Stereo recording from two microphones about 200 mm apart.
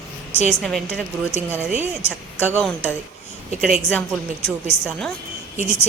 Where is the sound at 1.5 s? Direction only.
10° right (ahead or behind).